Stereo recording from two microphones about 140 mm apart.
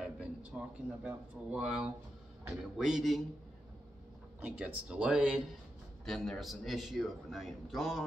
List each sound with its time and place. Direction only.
0.0 s a man's voice: 10° right (ahead or behind)
4.4 s a man's voice: 10° right (ahead or behind)